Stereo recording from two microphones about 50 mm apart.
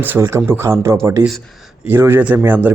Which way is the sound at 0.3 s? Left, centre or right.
Right.